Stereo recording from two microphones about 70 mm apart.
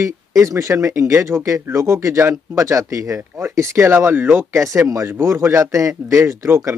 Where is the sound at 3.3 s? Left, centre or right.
Right.